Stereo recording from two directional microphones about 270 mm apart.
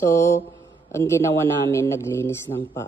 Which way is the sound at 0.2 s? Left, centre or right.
Centre.